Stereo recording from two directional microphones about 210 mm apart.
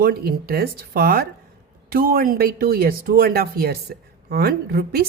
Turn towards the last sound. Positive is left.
turn(degrees=-50)  # may be behind; listen again after turning